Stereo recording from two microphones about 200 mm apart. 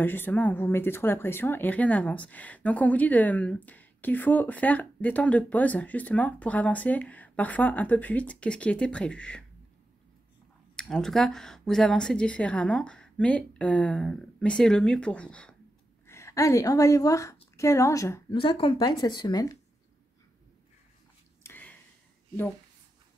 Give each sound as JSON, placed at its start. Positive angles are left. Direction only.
{"t": 0.0, "sound": "speech", "side_deg": 10}
{"t": 10.8, "sound": "speech", "side_deg": 5}
{"t": 21.4, "sound": "a sound", "side_deg": 10}